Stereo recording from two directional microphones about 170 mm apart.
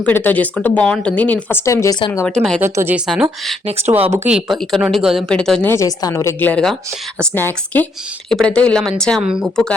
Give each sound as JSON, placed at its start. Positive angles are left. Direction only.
{"t": 0.0, "sound": "speech", "side_deg": 10}
{"t": 2.2, "sound": "a woman's voice", "side_deg": 5}
{"t": 2.6, "sound": "speech", "side_deg": -15}
{"t": 4.3, "sound": "a woman's voice", "side_deg": -5}
{"t": 5.7, "sound": "a woman's voice", "side_deg": 20}